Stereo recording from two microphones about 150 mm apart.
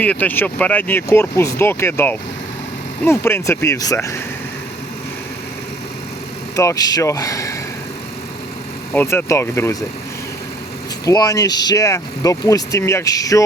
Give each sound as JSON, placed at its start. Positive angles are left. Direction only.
{"t": 0.0, "sound": "speech", "side_deg": 10}
{"t": 6.6, "sound": "speech", "side_deg": 20}
{"t": 8.9, "sound": "speech", "side_deg": 15}
{"t": 11.0, "sound": "speech", "side_deg": 25}